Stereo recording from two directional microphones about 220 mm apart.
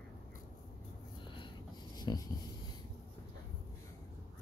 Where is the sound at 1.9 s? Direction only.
20° left (ahead or behind).